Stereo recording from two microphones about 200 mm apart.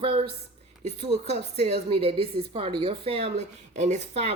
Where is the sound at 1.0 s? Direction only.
30° right (ahead or behind).